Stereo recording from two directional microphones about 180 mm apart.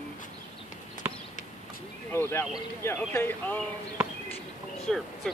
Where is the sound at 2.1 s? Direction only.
15° left (ahead or behind).